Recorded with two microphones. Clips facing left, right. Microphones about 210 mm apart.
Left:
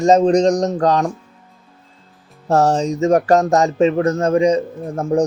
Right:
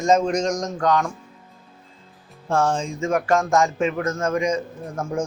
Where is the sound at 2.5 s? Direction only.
40° left (ahead or behind).